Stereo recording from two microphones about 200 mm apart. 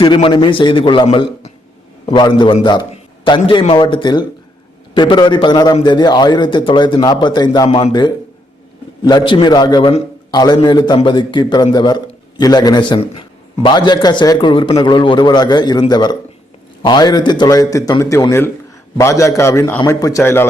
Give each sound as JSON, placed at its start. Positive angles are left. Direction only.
{"t": 0.0, "sound": "speech", "side_deg": 25}